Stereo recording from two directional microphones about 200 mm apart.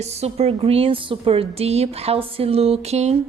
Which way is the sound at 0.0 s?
30° right (ahead or behind).